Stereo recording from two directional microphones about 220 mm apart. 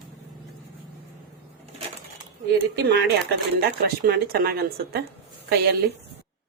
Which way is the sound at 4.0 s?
45° right (ahead or behind).